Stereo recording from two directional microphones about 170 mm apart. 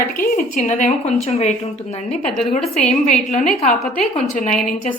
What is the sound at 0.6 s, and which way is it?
Speech, 40° left (ahead or behind).